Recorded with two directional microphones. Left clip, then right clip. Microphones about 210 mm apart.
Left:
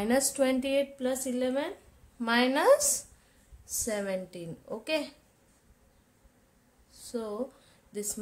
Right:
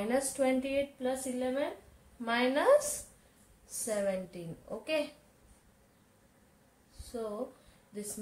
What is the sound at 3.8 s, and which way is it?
Speech, 50° left (ahead or behind).